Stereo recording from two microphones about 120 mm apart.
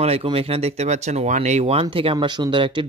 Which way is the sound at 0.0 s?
55° right (ahead or behind).